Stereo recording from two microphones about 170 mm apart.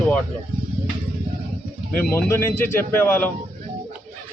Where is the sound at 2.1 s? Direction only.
15° left (ahead or behind).